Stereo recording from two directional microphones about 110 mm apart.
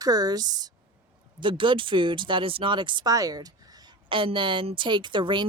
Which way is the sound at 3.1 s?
35° right (ahead or behind).